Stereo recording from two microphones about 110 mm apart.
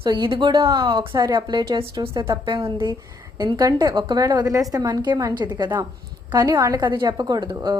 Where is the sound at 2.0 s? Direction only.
55° right (ahead or behind).